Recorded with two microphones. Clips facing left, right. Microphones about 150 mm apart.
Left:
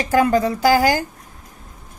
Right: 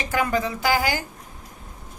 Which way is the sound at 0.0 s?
40° left (ahead or behind).